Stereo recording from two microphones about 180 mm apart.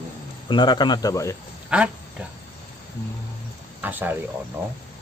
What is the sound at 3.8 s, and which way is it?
Speech, 10° right (ahead or behind).